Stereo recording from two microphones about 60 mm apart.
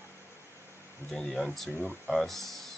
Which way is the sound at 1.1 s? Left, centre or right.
Centre.